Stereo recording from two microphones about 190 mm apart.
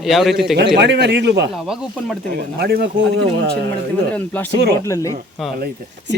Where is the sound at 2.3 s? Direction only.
55° right (ahead or behind).